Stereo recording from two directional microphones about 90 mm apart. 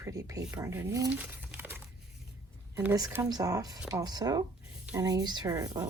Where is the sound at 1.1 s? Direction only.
15° right (ahead or behind).